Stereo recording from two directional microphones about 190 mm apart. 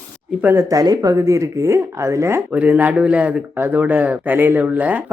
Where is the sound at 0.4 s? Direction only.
15° right (ahead or behind).